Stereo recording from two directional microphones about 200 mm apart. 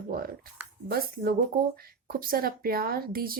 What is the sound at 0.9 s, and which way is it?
Speech, 50° right (ahead or behind).